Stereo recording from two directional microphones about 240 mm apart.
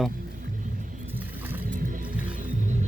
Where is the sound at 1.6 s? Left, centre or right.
Right.